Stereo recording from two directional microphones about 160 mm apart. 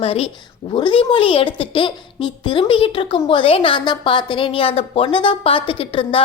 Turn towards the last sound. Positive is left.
turn(degrees=35)  # may be behind; listen again after turning